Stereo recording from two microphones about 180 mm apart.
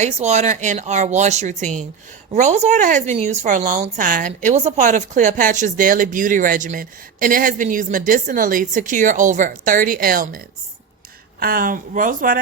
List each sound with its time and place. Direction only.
0.0 s a woman's voice: 40° right (ahead or behind)